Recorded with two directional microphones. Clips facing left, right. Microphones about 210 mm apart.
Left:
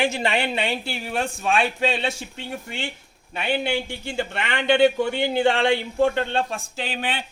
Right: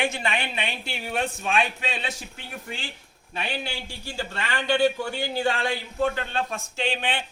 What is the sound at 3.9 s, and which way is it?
A man's voice, 20° left (ahead or behind).